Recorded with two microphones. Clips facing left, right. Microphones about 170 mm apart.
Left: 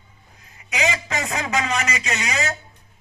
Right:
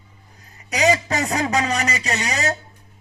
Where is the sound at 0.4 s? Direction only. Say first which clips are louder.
Right 6 dB; 40° right (ahead or behind).